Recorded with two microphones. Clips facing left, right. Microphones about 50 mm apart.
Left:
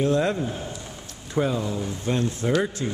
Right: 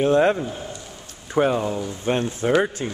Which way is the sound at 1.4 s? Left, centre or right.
Right.